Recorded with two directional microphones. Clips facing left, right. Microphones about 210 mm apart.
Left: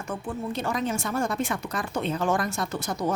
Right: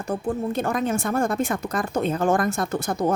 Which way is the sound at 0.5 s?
50° right (ahead or behind).